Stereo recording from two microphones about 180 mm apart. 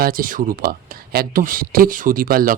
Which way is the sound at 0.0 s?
50° right (ahead or behind).